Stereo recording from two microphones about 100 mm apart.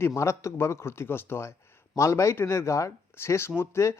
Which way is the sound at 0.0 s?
30° left (ahead or behind).